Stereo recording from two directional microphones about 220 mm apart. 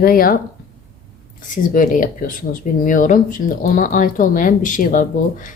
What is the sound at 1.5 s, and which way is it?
Speech, 35° left (ahead or behind).